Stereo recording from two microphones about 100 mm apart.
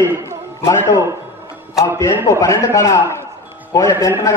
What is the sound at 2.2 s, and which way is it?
A man's voice, 30° left (ahead or behind).